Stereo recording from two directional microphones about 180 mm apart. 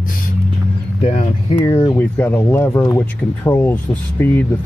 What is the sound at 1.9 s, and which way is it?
Speech, 10° left (ahead or behind).